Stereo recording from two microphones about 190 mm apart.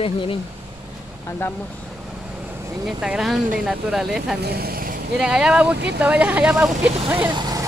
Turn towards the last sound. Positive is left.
turn(degrees=-20)  # may be behind; listen again after turning